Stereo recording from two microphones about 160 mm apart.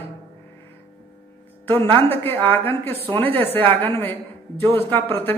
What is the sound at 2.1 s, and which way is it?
A man's voice, 15° left (ahead or behind).